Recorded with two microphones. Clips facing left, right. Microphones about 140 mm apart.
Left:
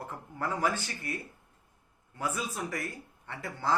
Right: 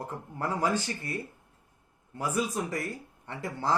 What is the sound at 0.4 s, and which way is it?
Speech, 20° right (ahead or behind).